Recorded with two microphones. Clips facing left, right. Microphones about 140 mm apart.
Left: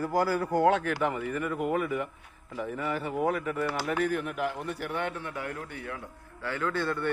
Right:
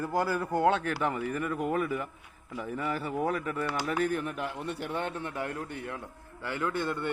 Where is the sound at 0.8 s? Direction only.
35° right (ahead or behind).